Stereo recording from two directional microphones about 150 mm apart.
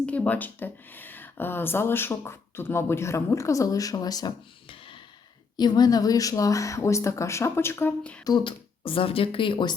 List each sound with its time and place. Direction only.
0.0 s speech: 10° left (ahead or behind)
8.2 s speech: 30° left (ahead or behind)